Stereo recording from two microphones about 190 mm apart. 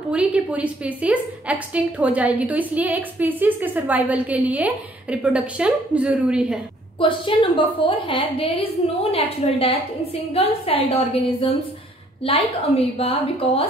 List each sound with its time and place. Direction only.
0.1 s a woman's voice: 5° right (ahead or behind)
7.0 s a woman's voice: 25° left (ahead or behind)
13.0 s a woman's voice: 30° left (ahead or behind)